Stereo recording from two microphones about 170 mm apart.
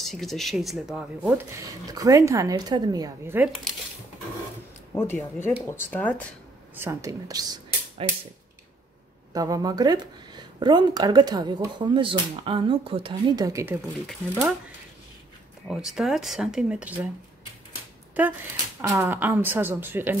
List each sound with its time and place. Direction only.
0.0 s speech: centre (ahead or behind)
1.9 s speech: 20° right (ahead or behind)
4.9 s speech: 15° left (ahead or behind)
6.7 s speech: 15° right (ahead or behind)
8.0 s speech: 35° right (ahead or behind)
9.3 s speech: 20° right (ahead or behind)
13.5 s speech: 15° right (ahead or behind)
15.7 s speech: centre (ahead or behind)
18.2 s speech: 10° right (ahead or behind)